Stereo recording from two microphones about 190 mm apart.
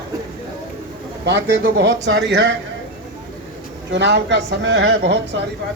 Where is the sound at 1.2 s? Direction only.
65° right (ahead or behind).